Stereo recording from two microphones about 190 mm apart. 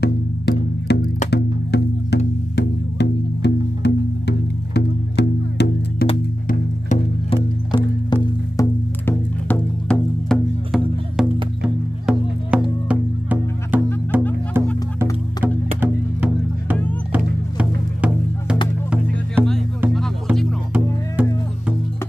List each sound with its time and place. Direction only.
0.0 s music: 60° left (ahead or behind)
6.4 s music: 40° left (ahead or behind)
7.7 s music: 25° left (ahead or behind)
9.0 s music: 5° left (ahead or behind); by 19.5 s 10° right (ahead or behind)
21.2 s music: 10° right (ahead or behind)